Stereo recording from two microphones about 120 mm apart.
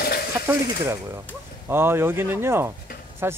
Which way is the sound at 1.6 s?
20° right (ahead or behind).